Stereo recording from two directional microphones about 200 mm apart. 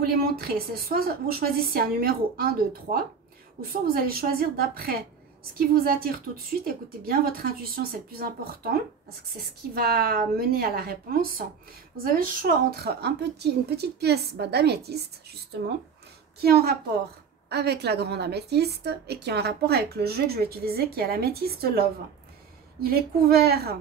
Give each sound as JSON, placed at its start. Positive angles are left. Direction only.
{"t": 0.0, "sound": "a woman's voice", "side_deg": -50}
{"t": 9.8, "sound": "a woman's voice", "side_deg": -50}
{"t": 16.3, "sound": "a woman's voice", "side_deg": -50}